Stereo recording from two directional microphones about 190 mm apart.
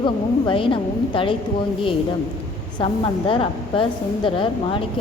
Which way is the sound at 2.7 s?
25° left (ahead or behind).